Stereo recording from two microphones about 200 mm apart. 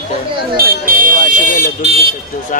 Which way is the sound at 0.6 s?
45° right (ahead or behind).